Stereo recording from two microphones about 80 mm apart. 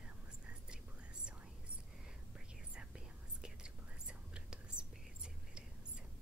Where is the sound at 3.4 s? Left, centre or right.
Centre.